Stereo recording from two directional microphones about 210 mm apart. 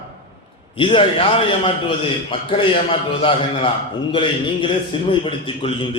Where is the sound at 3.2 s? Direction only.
25° left (ahead or behind).